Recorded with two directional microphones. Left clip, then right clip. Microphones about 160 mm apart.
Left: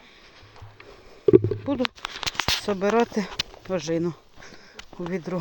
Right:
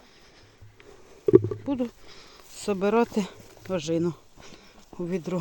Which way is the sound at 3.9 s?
15° right (ahead or behind).